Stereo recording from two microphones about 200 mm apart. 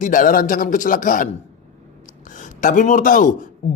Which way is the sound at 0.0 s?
40° left (ahead or behind).